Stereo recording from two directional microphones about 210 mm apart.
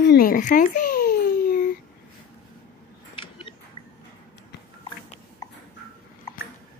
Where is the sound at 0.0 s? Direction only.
50° left (ahead or behind).